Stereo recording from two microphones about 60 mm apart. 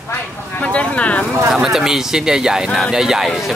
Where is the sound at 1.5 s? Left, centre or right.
Centre.